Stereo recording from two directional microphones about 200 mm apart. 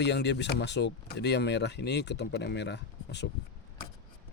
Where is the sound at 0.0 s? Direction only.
60° left (ahead or behind).